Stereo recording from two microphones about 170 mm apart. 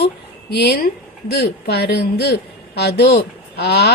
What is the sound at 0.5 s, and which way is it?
Speech, 70° left (ahead or behind).